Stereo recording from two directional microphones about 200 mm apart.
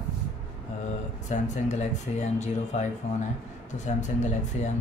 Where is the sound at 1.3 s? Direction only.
35° left (ahead or behind).